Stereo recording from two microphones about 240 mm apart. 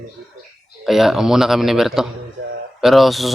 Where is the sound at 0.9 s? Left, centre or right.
Centre.